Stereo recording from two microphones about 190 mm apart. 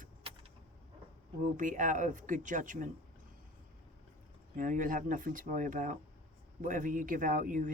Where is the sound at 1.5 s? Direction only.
40° right (ahead or behind).